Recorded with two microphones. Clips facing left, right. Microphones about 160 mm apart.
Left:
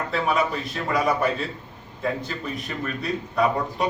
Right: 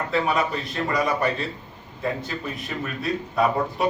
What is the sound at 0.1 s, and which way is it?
A man's voice, centre (ahead or behind).